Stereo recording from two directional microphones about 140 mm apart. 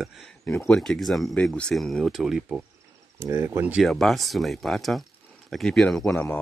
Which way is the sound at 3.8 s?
Centre (ahead or behind).